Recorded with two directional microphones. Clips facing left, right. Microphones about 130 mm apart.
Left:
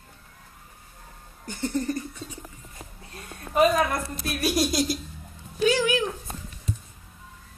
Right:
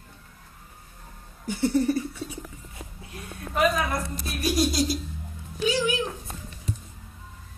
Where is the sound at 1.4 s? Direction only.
10° right (ahead or behind).